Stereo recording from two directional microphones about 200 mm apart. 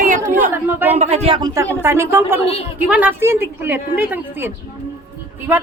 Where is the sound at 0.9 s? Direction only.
30° right (ahead or behind).